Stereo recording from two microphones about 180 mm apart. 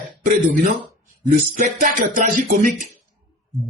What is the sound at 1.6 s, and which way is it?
Speech, 45° right (ahead or behind).